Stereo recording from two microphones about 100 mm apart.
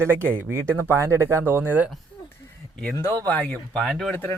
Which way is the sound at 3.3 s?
15° left (ahead or behind).